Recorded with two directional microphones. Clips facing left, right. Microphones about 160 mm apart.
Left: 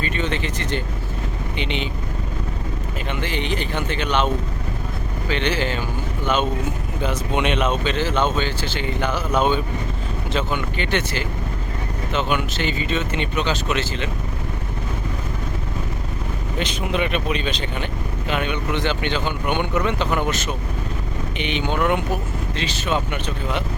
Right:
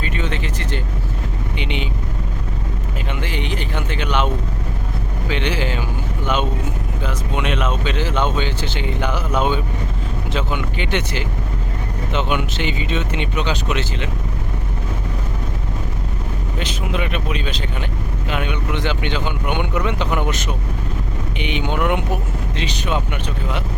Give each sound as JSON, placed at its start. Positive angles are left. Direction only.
{"t": 0.0, "sound": "speech", "side_deg": -5}
{"t": 3.1, "sound": "speech", "side_deg": -10}
{"t": 5.3, "sound": "speech", "side_deg": -10}
{"t": 7.0, "sound": "speech", "side_deg": 0}
{"t": 7.9, "sound": "speech", "side_deg": -15}
{"t": 16.6, "sound": "speech", "side_deg": -5}